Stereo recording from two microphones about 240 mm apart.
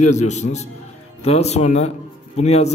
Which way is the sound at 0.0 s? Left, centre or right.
Left.